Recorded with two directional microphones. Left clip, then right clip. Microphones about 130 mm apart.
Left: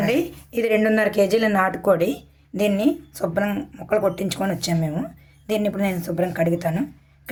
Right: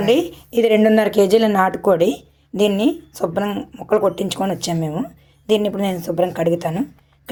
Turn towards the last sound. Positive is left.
turn(degrees=-30)  # may be behind; listen again after turning